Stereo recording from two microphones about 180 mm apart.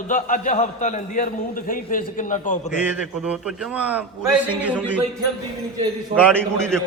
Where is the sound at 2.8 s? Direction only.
10° right (ahead or behind).